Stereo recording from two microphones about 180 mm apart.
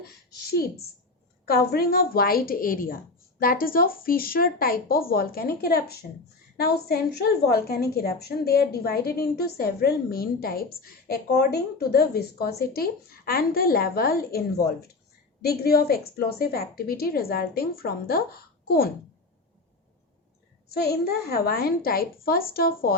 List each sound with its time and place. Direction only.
0.0 s a woman's voice: 60° left (ahead or behind)
20.8 s a woman's voice: 60° left (ahead or behind)